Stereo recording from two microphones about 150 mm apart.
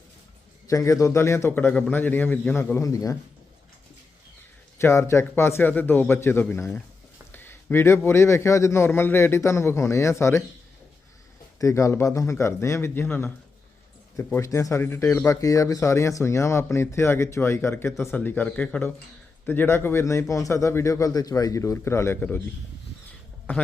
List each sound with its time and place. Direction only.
0.7 s speech: 20° left (ahead or behind)
2.7 s speech: 20° left (ahead or behind)
4.8 s speech: 15° left (ahead or behind)
11.6 s speech: 20° left (ahead or behind)
23.5 s speech: 10° left (ahead or behind)